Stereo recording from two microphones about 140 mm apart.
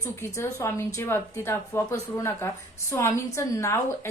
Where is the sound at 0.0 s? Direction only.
20° left (ahead or behind).